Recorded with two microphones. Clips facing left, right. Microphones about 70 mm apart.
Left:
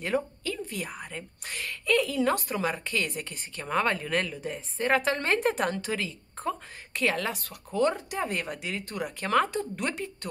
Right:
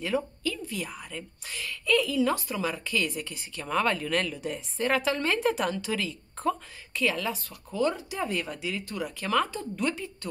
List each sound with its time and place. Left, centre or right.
0.0 s a woman's voice: left
4.4 s a woman's voice: left
6.9 s speech: left
9.5 s speech: left